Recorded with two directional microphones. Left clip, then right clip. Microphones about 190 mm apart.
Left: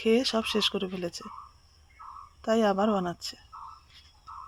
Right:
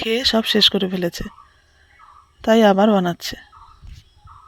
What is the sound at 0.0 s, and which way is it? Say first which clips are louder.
Speech: right 7 dB; 25° right (ahead or behind).